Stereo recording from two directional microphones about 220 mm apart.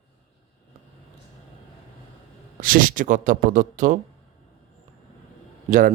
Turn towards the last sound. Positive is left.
turn(degrees=-40)  # may be behind; listen again after turning